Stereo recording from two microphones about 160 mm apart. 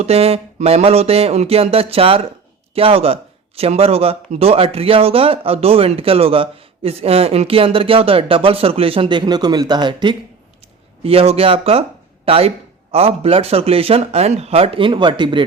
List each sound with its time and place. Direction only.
0.0 s a man's voice: 40° right (ahead or behind)